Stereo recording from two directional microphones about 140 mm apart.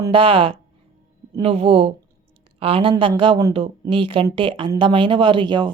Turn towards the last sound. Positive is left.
turn(degrees=-35)  # may be behind; listen again after turning